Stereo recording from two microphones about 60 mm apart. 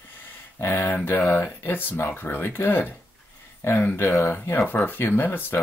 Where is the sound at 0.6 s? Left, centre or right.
Left.